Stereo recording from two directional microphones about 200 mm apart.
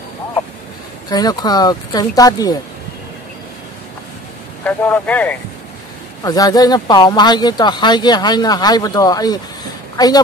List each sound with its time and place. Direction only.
1.0 s speech: 20° left (ahead or behind)
4.6 s speech: 10° left (ahead or behind)
6.2 s a woman's voice: 20° left (ahead or behind)